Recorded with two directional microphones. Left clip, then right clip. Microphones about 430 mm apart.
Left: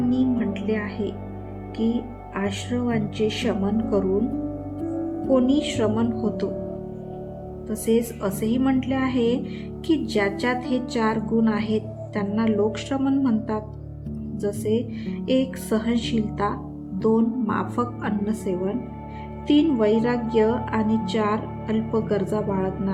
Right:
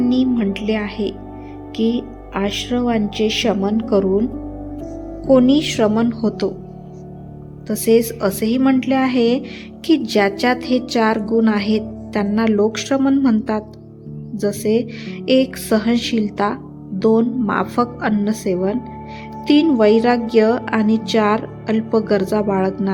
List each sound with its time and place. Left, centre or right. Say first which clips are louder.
0.1 s music: right 5 dB; centre
1.7 s a woman's voice: right 6 dB; centre
5.3 s a woman's voice: right 8 dB; centre
7.7 s a woman's voice: right 8 dB; centre